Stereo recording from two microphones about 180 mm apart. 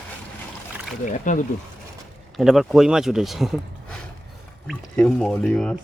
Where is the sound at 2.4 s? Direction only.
Centre (ahead or behind).